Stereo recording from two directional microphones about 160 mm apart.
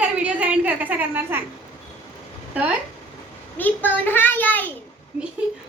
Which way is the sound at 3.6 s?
10° left (ahead or behind).